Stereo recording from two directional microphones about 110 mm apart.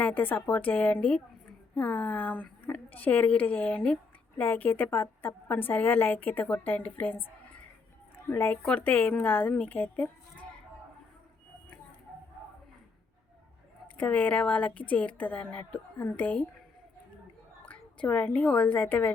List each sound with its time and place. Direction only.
0.0 s a woman's voice: 15° left (ahead or behind)
13.9 s a woman's voice: 15° left (ahead or behind)
17.7 s a woman's voice: 15° left (ahead or behind)